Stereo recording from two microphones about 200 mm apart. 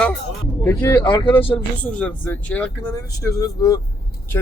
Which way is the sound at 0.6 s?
10° left (ahead or behind).